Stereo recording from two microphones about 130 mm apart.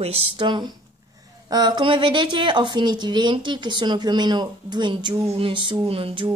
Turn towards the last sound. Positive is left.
turn(degrees=-40)  # may be behind; listen again after turning